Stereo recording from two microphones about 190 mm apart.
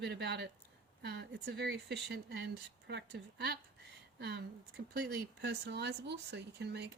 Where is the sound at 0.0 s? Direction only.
60° right (ahead or behind).